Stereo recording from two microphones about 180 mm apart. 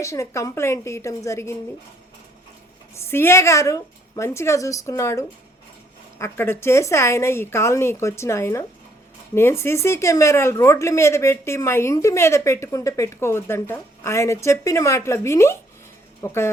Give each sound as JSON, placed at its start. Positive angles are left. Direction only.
{"t": 0.0, "sound": "a woman's voice", "side_deg": 15}
{"t": 2.9, "sound": "a woman's voice", "side_deg": 15}